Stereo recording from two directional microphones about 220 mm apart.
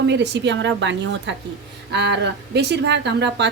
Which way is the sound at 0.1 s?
50° right (ahead or behind).